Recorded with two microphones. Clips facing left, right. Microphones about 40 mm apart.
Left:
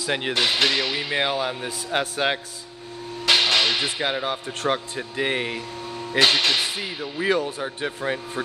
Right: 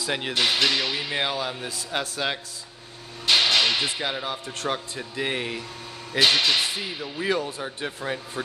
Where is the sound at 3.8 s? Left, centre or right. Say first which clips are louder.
Left 3 dB; centre.